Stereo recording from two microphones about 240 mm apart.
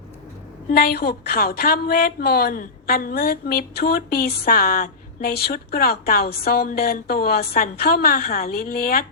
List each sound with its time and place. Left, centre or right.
0.7 s speech: left